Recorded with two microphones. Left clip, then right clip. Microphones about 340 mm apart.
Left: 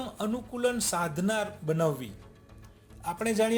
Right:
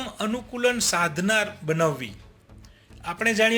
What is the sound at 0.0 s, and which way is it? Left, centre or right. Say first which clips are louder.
A man's voice: right 4 dB; left.